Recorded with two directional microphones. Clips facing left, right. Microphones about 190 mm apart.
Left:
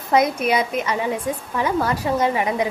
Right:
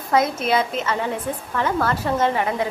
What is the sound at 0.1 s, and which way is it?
A woman's voice, 15° left (ahead or behind).